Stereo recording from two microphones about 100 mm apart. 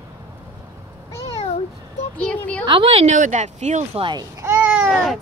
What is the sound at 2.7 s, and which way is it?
Speech, 60° right (ahead or behind).